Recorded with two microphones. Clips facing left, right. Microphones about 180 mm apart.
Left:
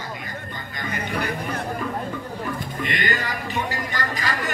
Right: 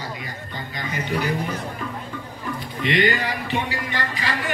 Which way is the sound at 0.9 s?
55° left (ahead or behind).